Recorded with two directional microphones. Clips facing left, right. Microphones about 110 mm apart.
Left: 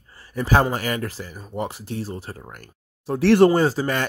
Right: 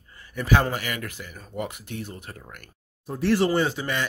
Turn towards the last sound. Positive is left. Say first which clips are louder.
# left 5 dB
turn(degrees=40)  # may be behind; listen again after turning